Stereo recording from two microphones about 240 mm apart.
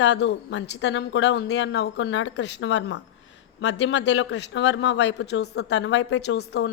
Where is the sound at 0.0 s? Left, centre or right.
Left.